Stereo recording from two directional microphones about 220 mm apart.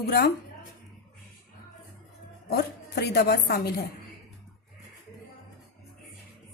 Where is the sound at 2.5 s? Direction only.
45° left (ahead or behind).